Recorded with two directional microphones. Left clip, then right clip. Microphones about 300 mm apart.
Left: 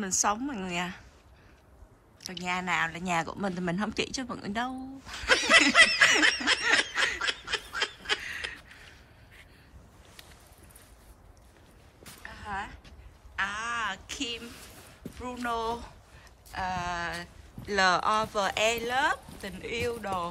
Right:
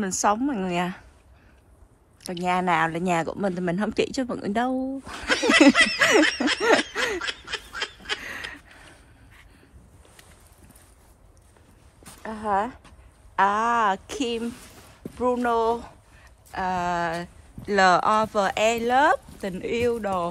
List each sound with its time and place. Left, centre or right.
0.0 s a woman's voice: centre
2.2 s speech: centre
12.2 s a sound: centre
13.4 s speech: centre
14.7 s a sound: right
15.1 s a woman's voice: centre